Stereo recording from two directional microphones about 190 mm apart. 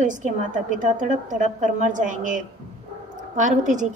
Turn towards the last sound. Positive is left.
turn(degrees=-40)  # may be behind; listen again after turning